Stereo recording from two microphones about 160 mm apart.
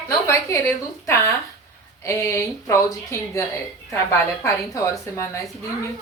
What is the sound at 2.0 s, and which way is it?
Speech, 20° left (ahead or behind).